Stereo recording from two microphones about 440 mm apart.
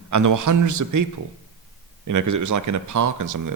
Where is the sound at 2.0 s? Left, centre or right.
Right.